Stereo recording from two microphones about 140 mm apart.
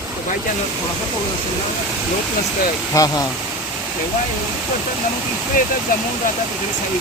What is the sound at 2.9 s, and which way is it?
Speech, 25° left (ahead or behind).